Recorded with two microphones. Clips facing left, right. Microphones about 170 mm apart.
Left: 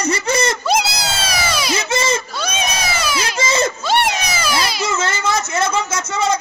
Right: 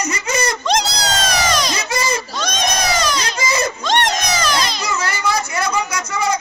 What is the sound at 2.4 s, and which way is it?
Crowd, 5° left (ahead or behind).